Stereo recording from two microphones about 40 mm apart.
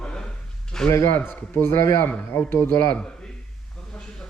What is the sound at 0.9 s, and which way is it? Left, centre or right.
A man's voice, left.